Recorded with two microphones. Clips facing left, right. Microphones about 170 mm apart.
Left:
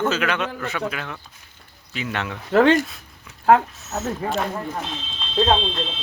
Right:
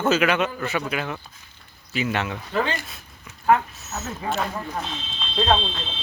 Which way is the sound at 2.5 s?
80° left.